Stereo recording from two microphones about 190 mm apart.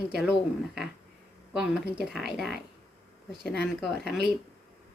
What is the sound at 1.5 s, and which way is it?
Speech, 5° right (ahead or behind).